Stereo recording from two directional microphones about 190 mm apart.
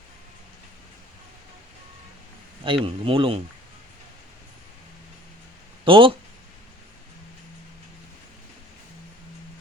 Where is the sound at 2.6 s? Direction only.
25° right (ahead or behind).